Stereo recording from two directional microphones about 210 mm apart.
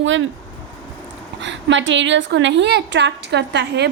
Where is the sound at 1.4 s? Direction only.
60° right (ahead or behind).